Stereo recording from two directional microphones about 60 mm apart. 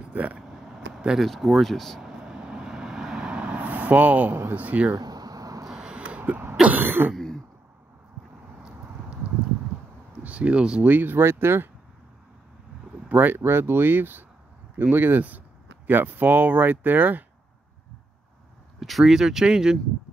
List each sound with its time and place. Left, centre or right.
0.0 s vehicle: right
0.4 s vehicle: centre
1.3 s speech: centre
2.0 s vehicle: centre; by 4.4 s right
4.6 s speech: right
4.9 s a sound: right
5.7 s a sound: centre
6.8 s throat clearing: right
10.2 s speech: right
10.9 s speech: right
13.1 s speech: right
18.8 s speech: centre